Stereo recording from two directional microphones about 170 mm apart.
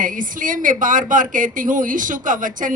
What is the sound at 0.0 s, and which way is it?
A woman's voice, 50° right (ahead or behind).